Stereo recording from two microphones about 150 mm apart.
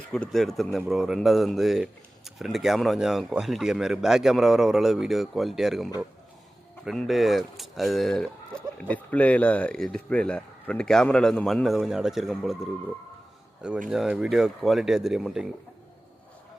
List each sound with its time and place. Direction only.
0.1 s speech: 5° left (ahead or behind)
13.6 s speech: 5° right (ahead or behind)